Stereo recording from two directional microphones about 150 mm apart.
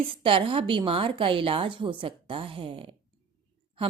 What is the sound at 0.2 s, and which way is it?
A woman's voice, 35° right (ahead or behind).